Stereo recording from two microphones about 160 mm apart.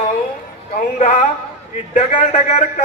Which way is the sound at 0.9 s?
50° left (ahead or behind).